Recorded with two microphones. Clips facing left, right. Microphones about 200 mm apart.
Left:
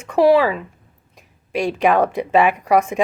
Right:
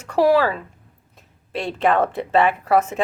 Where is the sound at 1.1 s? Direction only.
15° left (ahead or behind).